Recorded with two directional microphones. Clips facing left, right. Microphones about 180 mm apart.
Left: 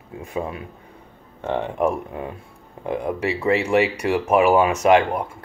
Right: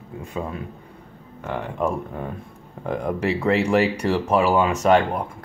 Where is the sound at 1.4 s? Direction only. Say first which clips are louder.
Left 5 dB; 25° left (ahead or behind).